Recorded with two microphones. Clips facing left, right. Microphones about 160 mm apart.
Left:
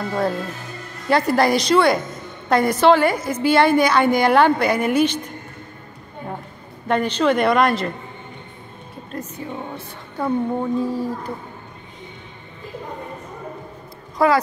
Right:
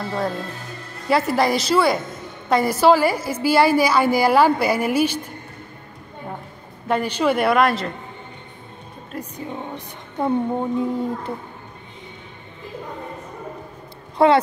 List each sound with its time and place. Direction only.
0.0 s a woman's voice: centre (ahead or behind)
6.9 s a woman's voice: 10° right (ahead or behind)
9.1 s a woman's voice: 10° right (ahead or behind)
9.8 s a woman's voice: 20° right (ahead or behind)
14.1 s speech: 25° right (ahead or behind)